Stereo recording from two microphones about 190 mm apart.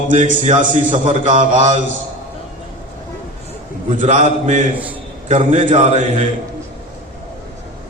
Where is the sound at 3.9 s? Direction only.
40° right (ahead or behind).